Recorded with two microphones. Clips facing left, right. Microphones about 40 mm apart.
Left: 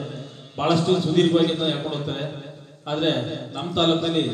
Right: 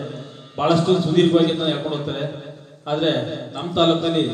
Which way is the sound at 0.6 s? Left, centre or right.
Centre.